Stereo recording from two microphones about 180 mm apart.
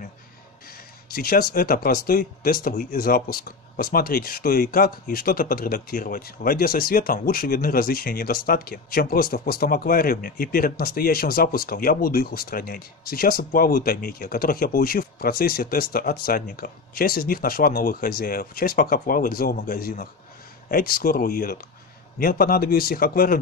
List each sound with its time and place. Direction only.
1.1 s a man's voice: 55° left (ahead or behind)